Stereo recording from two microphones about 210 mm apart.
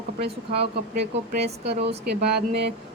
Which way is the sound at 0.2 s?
50° right (ahead or behind).